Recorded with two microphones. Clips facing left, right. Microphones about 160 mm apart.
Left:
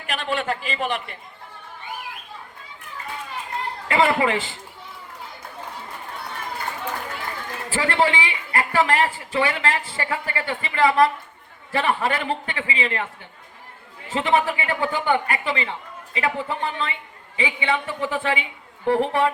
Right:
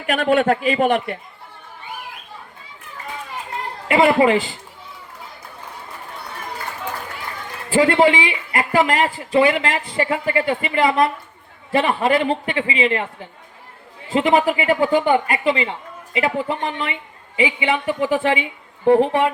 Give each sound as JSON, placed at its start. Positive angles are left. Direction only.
{"t": 0.1, "sound": "a man's voice", "side_deg": -55}
{"t": 3.8, "sound": "a woman's voice", "side_deg": -20}
{"t": 7.7, "sound": "a woman's voice", "side_deg": -20}